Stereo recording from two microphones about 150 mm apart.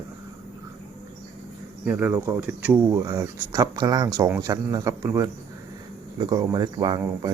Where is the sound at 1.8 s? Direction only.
10° right (ahead or behind).